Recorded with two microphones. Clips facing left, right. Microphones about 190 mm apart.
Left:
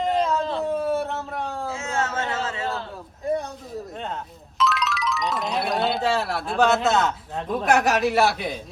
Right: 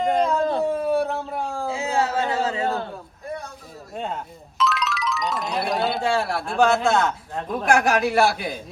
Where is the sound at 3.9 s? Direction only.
5° right (ahead or behind).